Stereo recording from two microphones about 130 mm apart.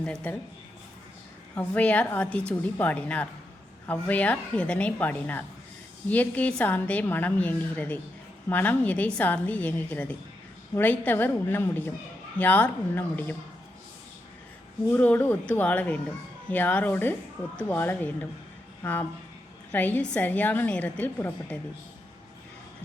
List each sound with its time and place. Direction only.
0.0 s a woman's voice: 10° left (ahead or behind)
1.5 s a woman's voice: 10° left (ahead or behind)
14.8 s a woman's voice: 15° left (ahead or behind)